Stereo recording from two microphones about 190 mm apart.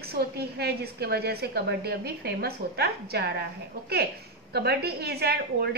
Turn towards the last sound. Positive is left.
turn(degrees=-55)  # may be behind; listen again after turning